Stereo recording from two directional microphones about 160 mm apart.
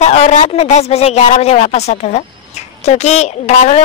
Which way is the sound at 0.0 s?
45° left (ahead or behind).